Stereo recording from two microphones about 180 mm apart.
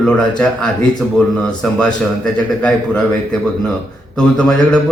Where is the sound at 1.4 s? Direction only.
5° left (ahead or behind).